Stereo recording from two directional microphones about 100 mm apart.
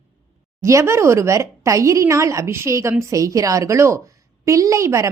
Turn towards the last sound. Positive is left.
turn(degrees=-30)  # may be behind; listen again after turning